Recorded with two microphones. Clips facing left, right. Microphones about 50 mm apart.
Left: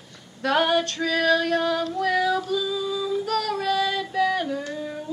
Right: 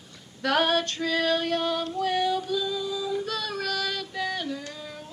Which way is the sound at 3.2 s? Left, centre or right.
Left.